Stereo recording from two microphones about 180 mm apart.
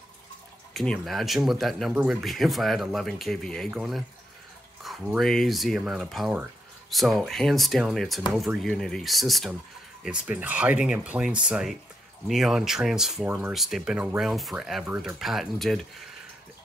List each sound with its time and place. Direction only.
0.7 s speech: centre (ahead or behind)